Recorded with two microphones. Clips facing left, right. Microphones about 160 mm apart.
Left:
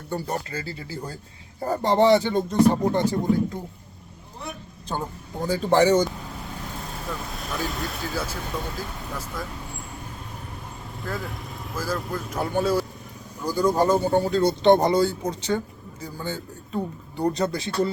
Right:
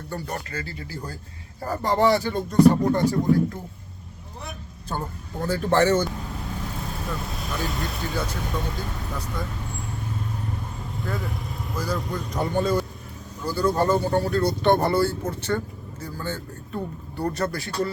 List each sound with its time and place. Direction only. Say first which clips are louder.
0.1 s speech: left 4 dB; 25° left (ahead or behind)
4.9 s speech: left 1 dB; 15° left (ahead or behind)
7.4 s speech: left 1 dB; centre (ahead or behind)
11.0 s speech: right 1 dB; centre (ahead or behind); by 17.9 s 20° left (ahead or behind)